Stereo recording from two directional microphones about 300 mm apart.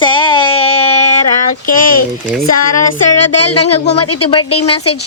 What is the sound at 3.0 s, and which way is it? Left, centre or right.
Speech, left.